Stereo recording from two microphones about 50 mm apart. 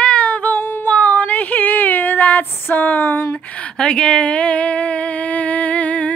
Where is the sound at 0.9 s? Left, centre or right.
Left.